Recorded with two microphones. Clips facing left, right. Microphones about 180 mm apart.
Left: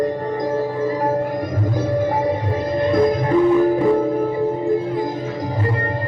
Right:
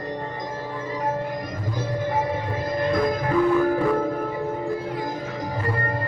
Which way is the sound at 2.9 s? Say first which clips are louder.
Left 6 dB; 25° left (ahead or behind).